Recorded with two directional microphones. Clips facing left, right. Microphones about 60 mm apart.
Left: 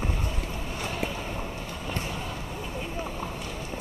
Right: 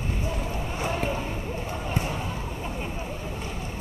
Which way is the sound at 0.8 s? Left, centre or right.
Right.